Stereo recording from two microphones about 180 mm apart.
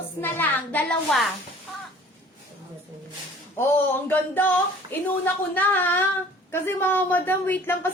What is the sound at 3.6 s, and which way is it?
A child's voice, 10° left (ahead or behind).